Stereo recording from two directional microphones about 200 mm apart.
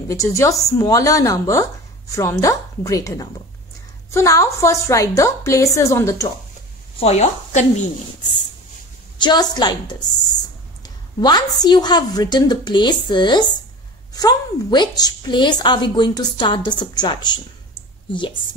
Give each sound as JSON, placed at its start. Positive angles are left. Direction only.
{"t": 0.1, "sound": "speech", "side_deg": 15}
{"t": 7.0, "sound": "a woman's voice", "side_deg": 35}
{"t": 9.2, "sound": "a woman's voice", "side_deg": 20}